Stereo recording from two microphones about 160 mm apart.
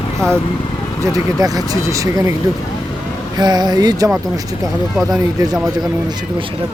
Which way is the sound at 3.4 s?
25° right (ahead or behind).